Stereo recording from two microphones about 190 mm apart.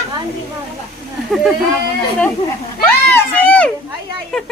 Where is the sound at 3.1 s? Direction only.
10° left (ahead or behind).